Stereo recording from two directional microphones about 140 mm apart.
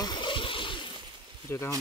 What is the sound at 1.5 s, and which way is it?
Speech, 15° left (ahead or behind).